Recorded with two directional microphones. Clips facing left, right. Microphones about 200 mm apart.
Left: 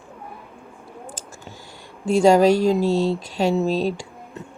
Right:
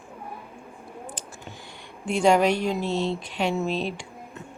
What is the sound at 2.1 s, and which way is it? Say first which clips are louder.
Speech: left 6 dB; 40° left (ahead or behind).